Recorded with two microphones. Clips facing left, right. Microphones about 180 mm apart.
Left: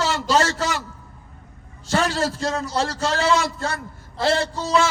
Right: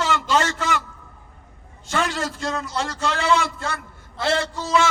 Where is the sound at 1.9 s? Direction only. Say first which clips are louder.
Left 3 dB; 35° left (ahead or behind).